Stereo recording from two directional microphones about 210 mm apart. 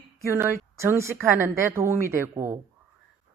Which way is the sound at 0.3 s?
10° right (ahead or behind).